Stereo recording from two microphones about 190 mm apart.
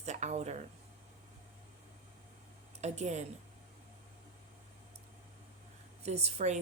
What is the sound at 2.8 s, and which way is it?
Speech, 35° right (ahead or behind).